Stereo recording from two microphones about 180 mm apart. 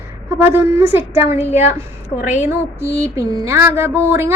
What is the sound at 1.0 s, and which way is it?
Speech, 15° right (ahead or behind).